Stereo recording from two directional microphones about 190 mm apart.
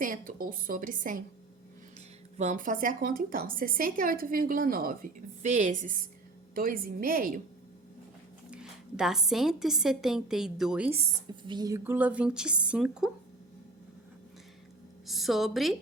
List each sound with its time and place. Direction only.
0.0 s a woman's voice: 45° right (ahead or behind)
2.4 s a woman's voice: 40° right (ahead or behind)
8.4 s a woman's voice: 5° right (ahead or behind)
11.4 s a woman's voice: 20° right (ahead or behind)
11.8 s a woman's voice: 10° right (ahead or behind)
15.0 s a woman's voice: centre (ahead or behind)